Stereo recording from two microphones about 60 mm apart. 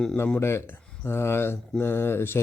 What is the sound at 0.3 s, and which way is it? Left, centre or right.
A man's voice, left.